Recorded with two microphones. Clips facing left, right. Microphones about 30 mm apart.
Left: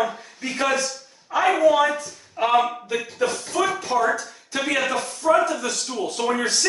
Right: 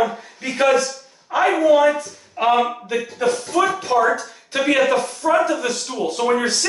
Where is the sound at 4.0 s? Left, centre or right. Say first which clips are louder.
Right 4 dB; right.